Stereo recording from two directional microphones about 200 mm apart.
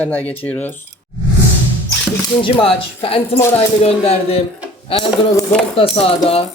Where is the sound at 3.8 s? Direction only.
30° left (ahead or behind).